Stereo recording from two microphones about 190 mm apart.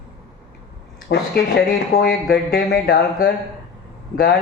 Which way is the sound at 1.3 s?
55° left (ahead or behind).